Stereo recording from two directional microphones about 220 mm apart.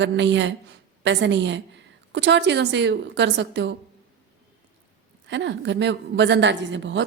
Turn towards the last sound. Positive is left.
turn(degrees=-55)  # may be behind; listen again after turning